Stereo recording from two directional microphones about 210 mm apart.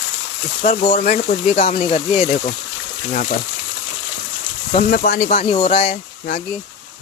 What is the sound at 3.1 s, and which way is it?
Speech, 40° left (ahead or behind).